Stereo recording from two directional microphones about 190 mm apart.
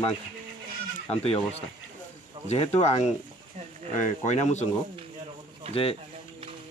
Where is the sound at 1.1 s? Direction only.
35° left (ahead or behind).